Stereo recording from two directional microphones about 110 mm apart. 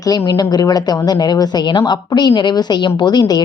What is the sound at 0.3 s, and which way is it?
A woman's voice, 35° left (ahead or behind).